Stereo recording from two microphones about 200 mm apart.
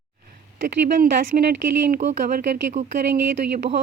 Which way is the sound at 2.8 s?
35° right (ahead or behind).